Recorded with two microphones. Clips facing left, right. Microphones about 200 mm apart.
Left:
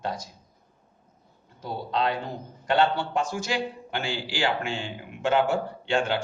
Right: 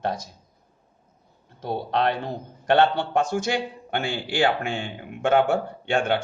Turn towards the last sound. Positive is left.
turn(degrees=-55)  # may be behind; listen again after turning